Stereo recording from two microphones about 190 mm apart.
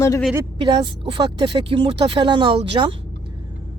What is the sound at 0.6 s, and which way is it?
Speech, 25° right (ahead or behind).